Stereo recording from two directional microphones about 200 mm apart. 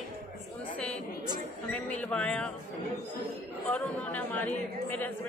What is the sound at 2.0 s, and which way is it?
Speech, 5° left (ahead or behind).